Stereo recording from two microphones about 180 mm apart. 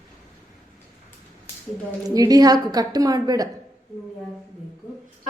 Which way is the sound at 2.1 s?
20° right (ahead or behind).